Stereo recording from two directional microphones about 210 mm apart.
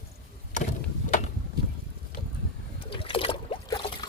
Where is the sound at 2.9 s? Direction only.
25° left (ahead or behind).